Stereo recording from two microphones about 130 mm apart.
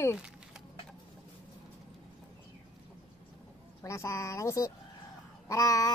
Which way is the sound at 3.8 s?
20° left (ahead or behind).